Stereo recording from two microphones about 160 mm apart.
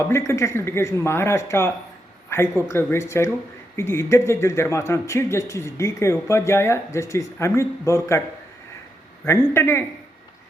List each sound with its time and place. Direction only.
0.0 s speech: 15° left (ahead or behind)
9.2 s speech: 15° left (ahead or behind)